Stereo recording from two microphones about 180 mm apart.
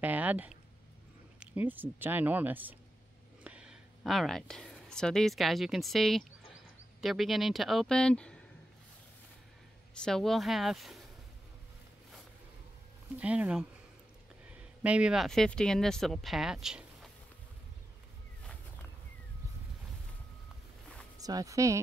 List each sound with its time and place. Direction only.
0.0 s speech: 10° right (ahead or behind)
9.9 s speech: 5° left (ahead or behind)
13.1 s speech: 5° right (ahead or behind)
18.4 s a sound: 5° left (ahead or behind)
21.2 s speech: 20° right (ahead or behind)